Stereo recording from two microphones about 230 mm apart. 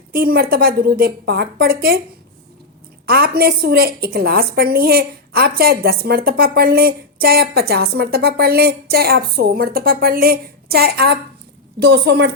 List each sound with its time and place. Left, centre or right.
0.1 s a woman's voice: right
3.1 s a woman's voice: right